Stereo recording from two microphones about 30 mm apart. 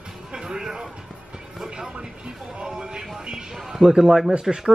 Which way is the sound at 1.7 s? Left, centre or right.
Right.